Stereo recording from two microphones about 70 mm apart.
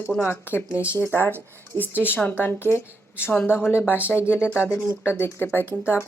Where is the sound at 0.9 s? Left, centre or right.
Left.